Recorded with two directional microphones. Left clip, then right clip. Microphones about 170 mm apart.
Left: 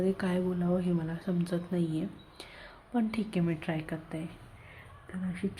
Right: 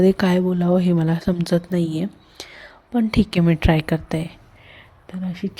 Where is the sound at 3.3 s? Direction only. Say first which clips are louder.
Right 14 dB; 50° right (ahead or behind).